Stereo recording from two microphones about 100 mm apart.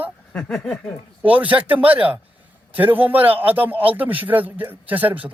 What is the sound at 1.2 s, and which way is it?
Speech, 15° right (ahead or behind).